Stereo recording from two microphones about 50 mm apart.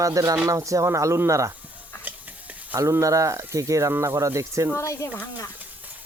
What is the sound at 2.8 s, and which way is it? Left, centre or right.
Speech, right.